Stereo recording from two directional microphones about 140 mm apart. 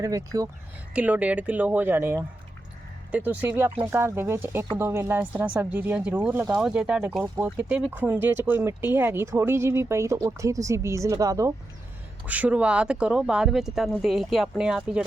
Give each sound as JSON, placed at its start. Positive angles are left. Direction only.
{"t": 0.0, "sound": "speech", "side_deg": -25}
{"t": 0.9, "sound": "speech", "side_deg": -10}
{"t": 6.6, "sound": "speech", "side_deg": -5}
{"t": 12.2, "sound": "speech", "side_deg": -10}